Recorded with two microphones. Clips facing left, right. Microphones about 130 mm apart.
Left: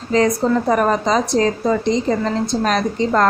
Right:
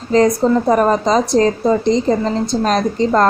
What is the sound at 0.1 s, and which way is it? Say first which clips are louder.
Speech: right 3 dB; 35° right (ahead or behind).